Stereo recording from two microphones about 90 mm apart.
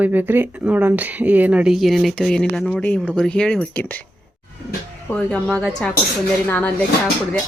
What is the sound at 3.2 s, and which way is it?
Speech, 10° left (ahead or behind).